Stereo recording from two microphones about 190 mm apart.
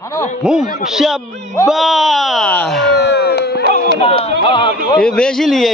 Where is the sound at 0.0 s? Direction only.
15° left (ahead or behind).